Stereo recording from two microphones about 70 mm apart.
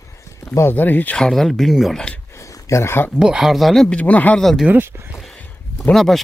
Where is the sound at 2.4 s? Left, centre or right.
Left.